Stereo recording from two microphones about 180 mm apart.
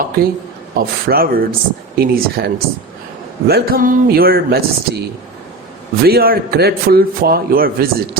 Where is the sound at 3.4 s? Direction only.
60° right (ahead or behind).